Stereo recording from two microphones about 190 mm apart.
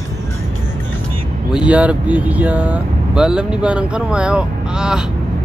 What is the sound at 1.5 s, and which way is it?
Speech, 5° right (ahead or behind).